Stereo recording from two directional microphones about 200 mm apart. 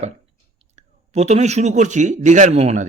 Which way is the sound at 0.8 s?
35° right (ahead or behind).